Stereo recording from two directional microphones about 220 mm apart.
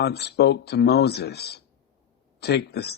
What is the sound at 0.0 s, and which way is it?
Speech, 50° left (ahead or behind).